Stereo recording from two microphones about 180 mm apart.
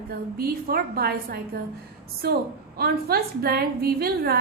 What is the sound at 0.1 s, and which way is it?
A woman's voice, 55° right (ahead or behind).